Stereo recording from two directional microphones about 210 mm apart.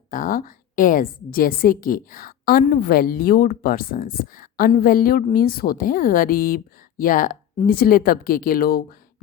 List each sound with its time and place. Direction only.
0.1 s a woman's voice: 40° left (ahead or behind)